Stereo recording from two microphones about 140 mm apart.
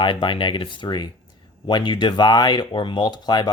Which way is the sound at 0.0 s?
35° left (ahead or behind).